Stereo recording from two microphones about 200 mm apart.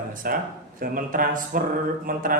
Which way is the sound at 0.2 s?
45° right (ahead or behind).